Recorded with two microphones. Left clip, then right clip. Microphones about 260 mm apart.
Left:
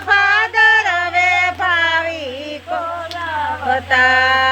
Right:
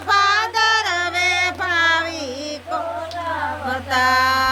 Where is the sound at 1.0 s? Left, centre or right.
Right.